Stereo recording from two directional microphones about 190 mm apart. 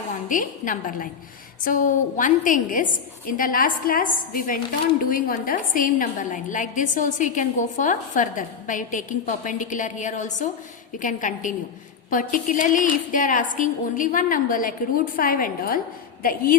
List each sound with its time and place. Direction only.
0.3 s a woman's voice: 45° left (ahead or behind)